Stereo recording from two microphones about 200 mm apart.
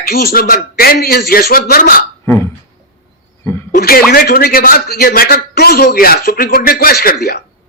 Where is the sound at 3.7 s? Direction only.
50° left (ahead or behind).